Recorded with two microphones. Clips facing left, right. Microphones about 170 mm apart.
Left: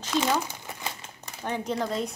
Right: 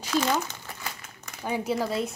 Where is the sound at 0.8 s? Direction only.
25° left (ahead or behind).